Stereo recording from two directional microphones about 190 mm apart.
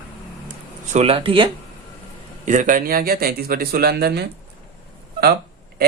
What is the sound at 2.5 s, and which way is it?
Speech, 40° right (ahead or behind).